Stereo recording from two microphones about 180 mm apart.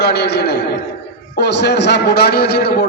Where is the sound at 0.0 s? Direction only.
65° left (ahead or behind).